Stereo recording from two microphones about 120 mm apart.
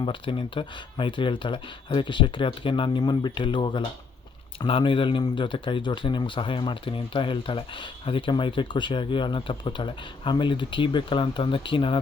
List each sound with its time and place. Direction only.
0.0 s speech: 50° left (ahead or behind)